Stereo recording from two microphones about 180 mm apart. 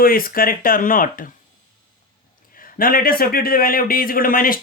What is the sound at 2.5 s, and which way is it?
A man's voice, 50° left (ahead or behind).